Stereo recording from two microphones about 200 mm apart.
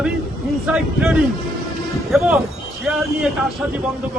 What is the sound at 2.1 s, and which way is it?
Speech, 5° right (ahead or behind).